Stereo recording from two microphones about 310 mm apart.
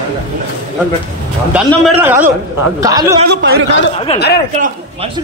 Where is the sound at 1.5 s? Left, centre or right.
Centre.